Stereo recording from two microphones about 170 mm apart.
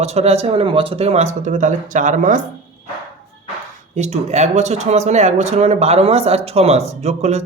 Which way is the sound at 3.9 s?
40° right (ahead or behind).